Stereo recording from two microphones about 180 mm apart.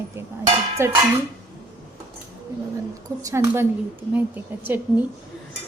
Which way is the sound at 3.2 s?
15° right (ahead or behind).